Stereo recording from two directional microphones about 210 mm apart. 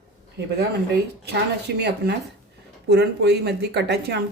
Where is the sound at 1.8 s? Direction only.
50° right (ahead or behind).